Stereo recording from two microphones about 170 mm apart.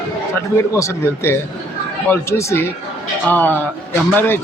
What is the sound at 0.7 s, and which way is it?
Speech, 15° left (ahead or behind).